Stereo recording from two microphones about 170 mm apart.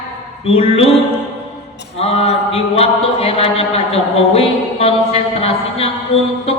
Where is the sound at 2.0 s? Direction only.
35° left (ahead or behind).